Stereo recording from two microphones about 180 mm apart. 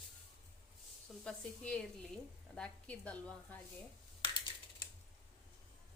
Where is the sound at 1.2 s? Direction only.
5° left (ahead or behind).